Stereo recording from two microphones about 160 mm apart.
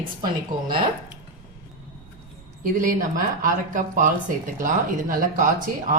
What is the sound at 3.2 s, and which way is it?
Speech, 55° right (ahead or behind).